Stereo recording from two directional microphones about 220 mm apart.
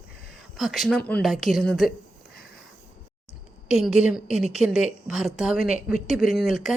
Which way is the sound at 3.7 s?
5° right (ahead or behind).